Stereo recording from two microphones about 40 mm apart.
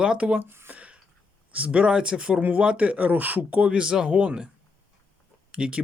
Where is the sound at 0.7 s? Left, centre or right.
Right.